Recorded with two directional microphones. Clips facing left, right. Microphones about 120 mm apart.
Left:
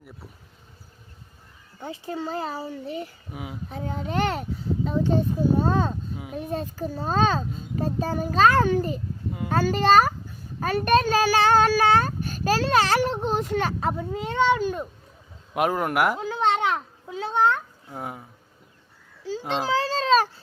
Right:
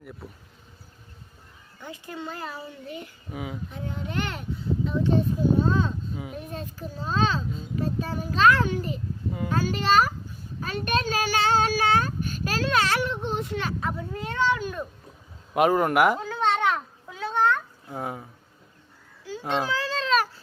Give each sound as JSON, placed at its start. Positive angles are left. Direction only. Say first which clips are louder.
{"t": 1.8, "sound": "speech", "louder": "left 5 dB", "side_deg": 30}
{"t": 3.3, "sound": "speech", "louder": "right 2 dB", "side_deg": 5}
{"t": 3.7, "sound": "speech", "louder": "left 4 dB", "side_deg": 40}
{"t": 14.3, "sound": "speech", "louder": "left 4 dB", "side_deg": 25}
{"t": 15.5, "sound": "speech", "louder": "right 3 dB", "side_deg": 0}
{"t": 16.1, "sound": "babbling", "louder": "left 1 dB", "side_deg": 15}
{"t": 17.9, "sound": "speech", "louder": "right 2 dB", "side_deg": 0}
{"t": 19.6, "sound": "a sound", "louder": "left 5 dB", "side_deg": 30}